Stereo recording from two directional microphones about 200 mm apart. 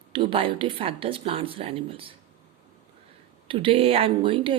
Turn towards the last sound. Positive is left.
turn(degrees=-25)  # may be behind; listen again after turning